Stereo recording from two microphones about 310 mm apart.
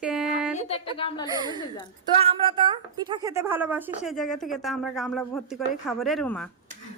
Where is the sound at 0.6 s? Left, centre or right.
Centre.